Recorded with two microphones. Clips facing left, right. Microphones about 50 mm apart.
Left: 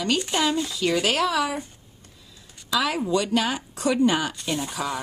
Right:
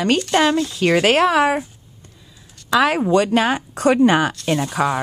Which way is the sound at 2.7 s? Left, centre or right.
Right.